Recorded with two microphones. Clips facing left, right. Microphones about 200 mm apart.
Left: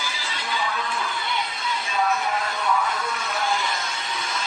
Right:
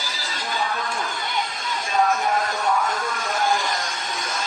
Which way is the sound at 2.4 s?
50° right (ahead or behind).